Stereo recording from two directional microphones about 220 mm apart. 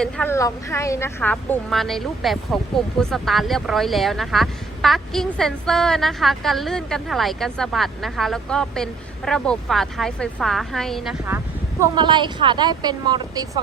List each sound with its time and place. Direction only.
0.0 s a woman's voice: 10° left (ahead or behind)
11.8 s speech: 20° right (ahead or behind)